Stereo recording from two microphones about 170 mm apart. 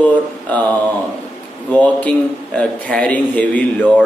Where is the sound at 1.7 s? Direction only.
10° left (ahead or behind).